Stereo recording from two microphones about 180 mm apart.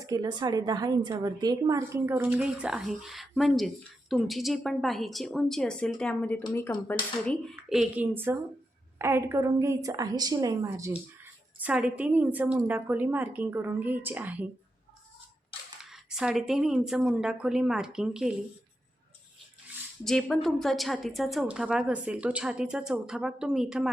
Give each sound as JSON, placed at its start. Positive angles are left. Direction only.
{"t": 0.0, "sound": "a woman's voice", "side_deg": -20}
{"t": 6.4, "sound": "speech", "side_deg": 15}
{"t": 7.7, "sound": "a woman's voice", "side_deg": -5}
{"t": 15.8, "sound": "a woman's voice", "side_deg": -5}
{"t": 20.1, "sound": "a woman's voice", "side_deg": 0}